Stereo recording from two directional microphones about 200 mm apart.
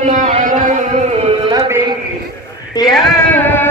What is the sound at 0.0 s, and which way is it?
Music, 35° right (ahead or behind).